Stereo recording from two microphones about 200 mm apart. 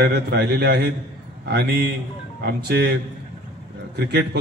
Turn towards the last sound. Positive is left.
turn(degrees=-55)  # may be behind; listen again after turning